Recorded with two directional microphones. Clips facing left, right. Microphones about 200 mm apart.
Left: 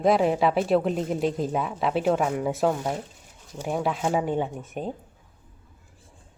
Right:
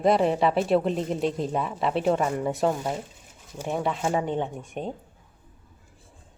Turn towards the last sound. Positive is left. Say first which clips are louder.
# left 1 dB
turn(degrees=0)  # may be behind; listen again after turning